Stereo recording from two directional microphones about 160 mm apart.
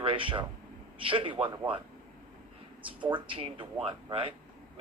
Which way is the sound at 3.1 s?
35° right (ahead or behind).